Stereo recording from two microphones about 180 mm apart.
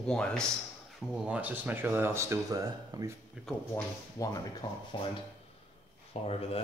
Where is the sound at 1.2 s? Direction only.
10° right (ahead or behind).